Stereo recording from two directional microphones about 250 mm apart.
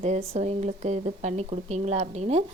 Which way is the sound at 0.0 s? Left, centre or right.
Right.